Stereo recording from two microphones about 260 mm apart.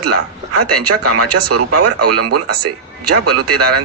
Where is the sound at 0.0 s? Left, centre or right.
Right.